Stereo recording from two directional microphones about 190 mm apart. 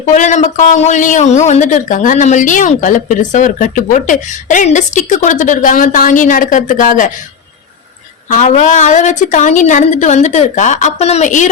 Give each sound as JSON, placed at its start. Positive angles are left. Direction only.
{"t": 0.1, "sound": "a man's voice", "side_deg": 40}
{"t": 8.3, "sound": "a man's voice", "side_deg": 40}